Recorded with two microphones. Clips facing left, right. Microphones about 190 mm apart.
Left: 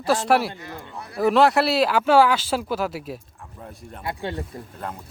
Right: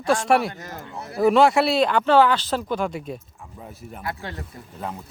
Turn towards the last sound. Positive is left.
turn(degrees=0)  # may be behind; listen again after turning